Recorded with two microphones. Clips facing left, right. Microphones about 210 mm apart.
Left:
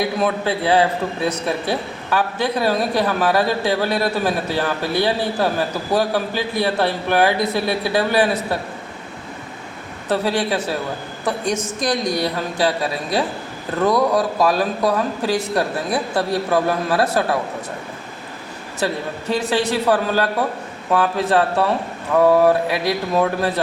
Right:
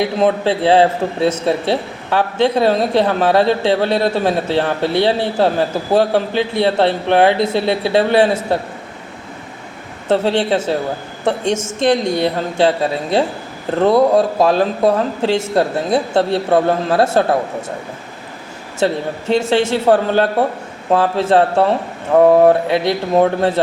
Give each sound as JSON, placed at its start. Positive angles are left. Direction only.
{"t": 0.0, "sound": "a man's voice", "side_deg": -25}
{"t": 10.1, "sound": "a man's voice", "side_deg": -25}
{"t": 18.8, "sound": "a man's voice", "side_deg": -25}